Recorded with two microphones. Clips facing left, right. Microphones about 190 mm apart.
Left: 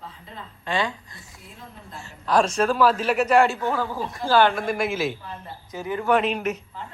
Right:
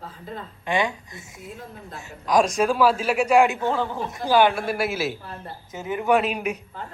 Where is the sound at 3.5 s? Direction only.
25° right (ahead or behind); by 5.4 s 10° right (ahead or behind).